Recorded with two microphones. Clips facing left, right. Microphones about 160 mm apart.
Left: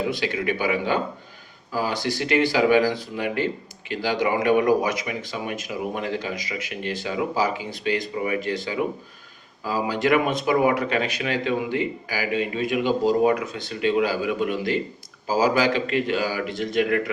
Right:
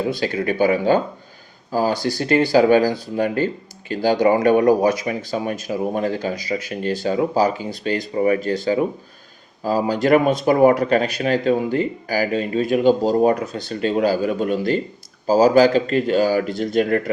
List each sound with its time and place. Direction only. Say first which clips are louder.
0.2 s speech: right 6 dB; 40° right (ahead or behind)